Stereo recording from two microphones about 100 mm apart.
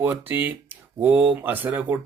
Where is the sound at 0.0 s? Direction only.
15° right (ahead or behind).